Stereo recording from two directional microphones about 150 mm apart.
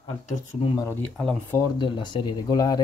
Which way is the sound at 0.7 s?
15° left (ahead or behind).